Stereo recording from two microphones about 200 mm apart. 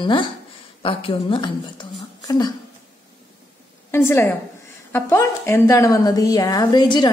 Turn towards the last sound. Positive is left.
turn(degrees=20)  # may be behind; listen again after turning